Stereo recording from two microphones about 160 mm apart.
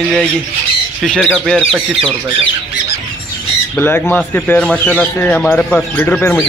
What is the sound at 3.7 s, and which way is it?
Speech, 10° left (ahead or behind).